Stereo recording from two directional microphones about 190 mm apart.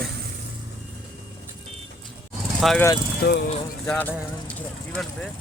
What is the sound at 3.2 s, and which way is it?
Speech, 60° left (ahead or behind).